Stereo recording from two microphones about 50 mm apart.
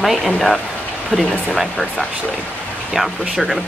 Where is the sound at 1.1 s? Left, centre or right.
Centre.